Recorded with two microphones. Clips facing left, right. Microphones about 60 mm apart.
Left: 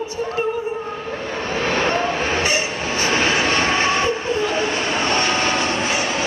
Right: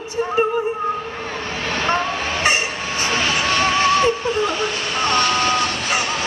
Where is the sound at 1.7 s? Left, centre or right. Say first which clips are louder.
Left 1 dB; left.